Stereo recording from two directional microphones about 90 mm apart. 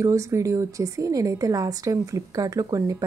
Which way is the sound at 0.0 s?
35° right (ahead or behind).